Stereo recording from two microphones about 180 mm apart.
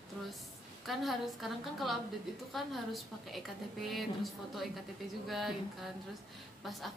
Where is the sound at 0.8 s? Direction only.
Centre (ahead or behind).